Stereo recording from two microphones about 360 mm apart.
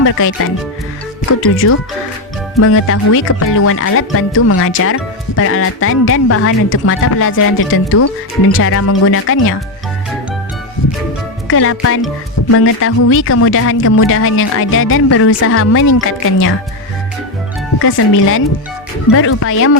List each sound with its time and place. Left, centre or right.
0.0 s speech: left
1.4 s speech: left
11.4 s speech: left
19.1 s speech: left